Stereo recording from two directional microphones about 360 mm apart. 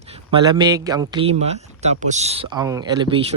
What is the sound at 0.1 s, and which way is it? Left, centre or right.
A man's voice, centre.